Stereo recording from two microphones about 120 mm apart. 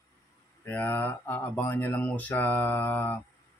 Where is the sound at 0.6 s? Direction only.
15° left (ahead or behind).